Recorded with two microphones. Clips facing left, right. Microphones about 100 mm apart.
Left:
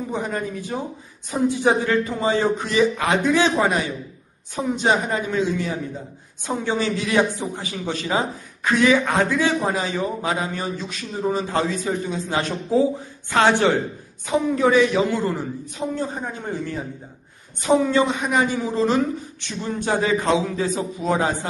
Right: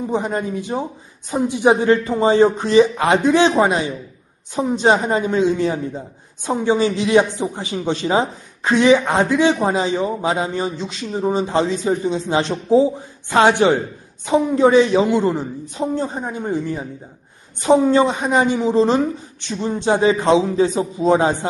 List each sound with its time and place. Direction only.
0.1 s a man's voice: 25° right (ahead or behind)
1.9 s a man's voice: 30° right (ahead or behind)
17.6 s a man's voice: 30° right (ahead or behind)